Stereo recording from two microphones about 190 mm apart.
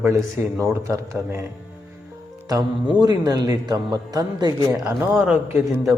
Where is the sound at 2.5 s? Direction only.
20° right (ahead or behind).